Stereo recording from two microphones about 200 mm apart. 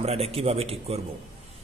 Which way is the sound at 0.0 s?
30° right (ahead or behind).